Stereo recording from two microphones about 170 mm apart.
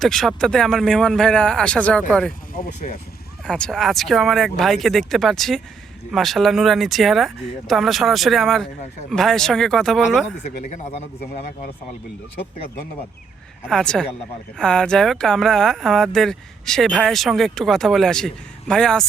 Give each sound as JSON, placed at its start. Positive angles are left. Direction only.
{"t": 0.0, "sound": "speech", "side_deg": 0}
{"t": 2.6, "sound": "speech", "side_deg": 45}
{"t": 3.4, "sound": "speech", "side_deg": 5}
{"t": 10.4, "sound": "speech", "side_deg": 40}
{"t": 13.7, "sound": "speech", "side_deg": 5}